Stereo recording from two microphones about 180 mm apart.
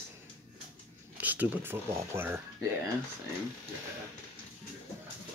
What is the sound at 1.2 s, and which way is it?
Speech, 10° right (ahead or behind).